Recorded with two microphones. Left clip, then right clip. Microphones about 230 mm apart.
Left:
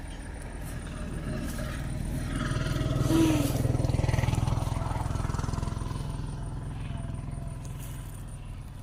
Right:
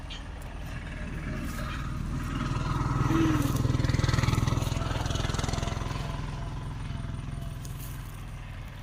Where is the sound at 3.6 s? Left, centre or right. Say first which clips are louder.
Right 1 dB; right.